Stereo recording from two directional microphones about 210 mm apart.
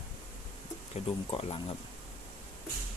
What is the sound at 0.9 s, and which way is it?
Speech, 30° left (ahead or behind).